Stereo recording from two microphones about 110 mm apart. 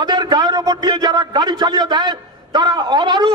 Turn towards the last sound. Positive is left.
turn(degrees=-45)  # may be behind; listen again after turning